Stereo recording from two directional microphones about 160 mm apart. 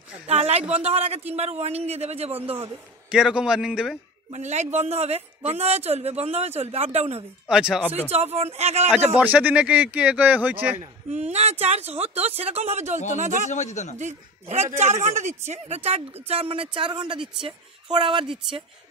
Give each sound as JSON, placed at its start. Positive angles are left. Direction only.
{"t": 0.3, "sound": "a sound", "side_deg": -40}
{"t": 0.7, "sound": "speech", "side_deg": -40}
{"t": 2.5, "sound": "a man's voice", "side_deg": -10}
{"t": 4.3, "sound": "speech", "side_deg": -45}
{"t": 7.4, "sound": "a man's voice", "side_deg": -5}
{"t": 8.1, "sound": "speech", "side_deg": -40}
{"t": 9.1, "sound": "speech", "side_deg": -10}
{"t": 10.8, "sound": "a man's voice", "side_deg": -45}
{"t": 13.5, "sound": "a man's voice", "side_deg": 45}
{"t": 13.9, "sound": "speech", "side_deg": -45}